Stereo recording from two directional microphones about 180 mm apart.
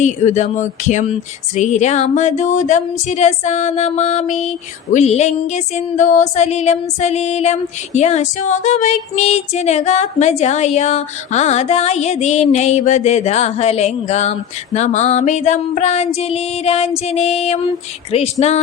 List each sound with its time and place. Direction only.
0.0 s speech: 40° left (ahead or behind)